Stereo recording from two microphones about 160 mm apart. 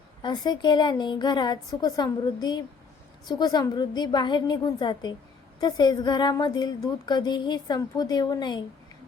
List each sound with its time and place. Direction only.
0.2 s a woman's voice: 25° left (ahead or behind)